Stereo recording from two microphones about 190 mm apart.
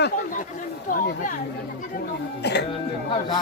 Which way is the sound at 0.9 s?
45° left (ahead or behind).